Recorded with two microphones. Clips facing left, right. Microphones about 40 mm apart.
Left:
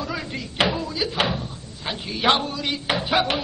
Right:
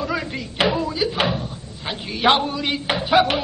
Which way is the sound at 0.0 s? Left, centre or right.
Centre.